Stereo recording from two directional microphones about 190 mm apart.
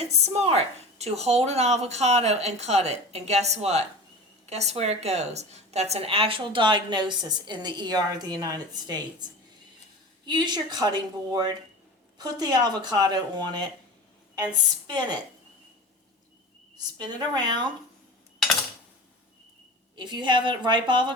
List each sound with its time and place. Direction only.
0.0 s a woman's voice: 35° right (ahead or behind)
10.2 s a woman's voice: 25° right (ahead or behind)
16.7 s a woman's voice: 20° right (ahead or behind)
20.0 s a woman's voice: 25° right (ahead or behind)